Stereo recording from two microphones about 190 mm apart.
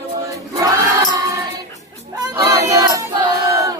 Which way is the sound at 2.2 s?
20° right (ahead or behind).